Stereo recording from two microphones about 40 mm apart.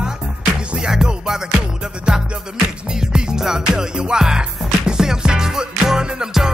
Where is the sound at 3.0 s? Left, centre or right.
Centre.